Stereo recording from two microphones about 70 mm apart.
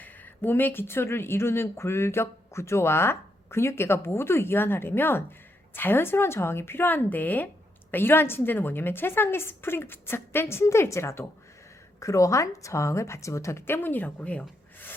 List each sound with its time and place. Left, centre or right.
0.0 s a woman's voice: left